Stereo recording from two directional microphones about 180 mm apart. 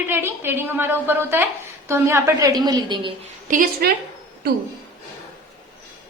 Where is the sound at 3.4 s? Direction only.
50° right (ahead or behind).